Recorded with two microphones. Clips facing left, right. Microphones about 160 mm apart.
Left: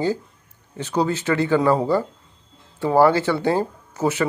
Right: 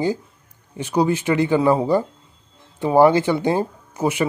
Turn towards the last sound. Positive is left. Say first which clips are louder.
# right 1 dB
turn(degrees=-15)  # may be behind; listen again after turning